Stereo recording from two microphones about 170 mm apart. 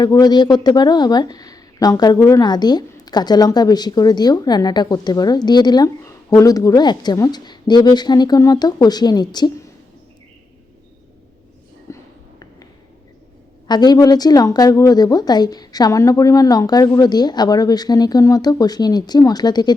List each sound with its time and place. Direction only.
0.0 s a woman's voice: 25° left (ahead or behind)
11.9 s a sound: 15° left (ahead or behind)
13.7 s a woman's voice: 25° left (ahead or behind)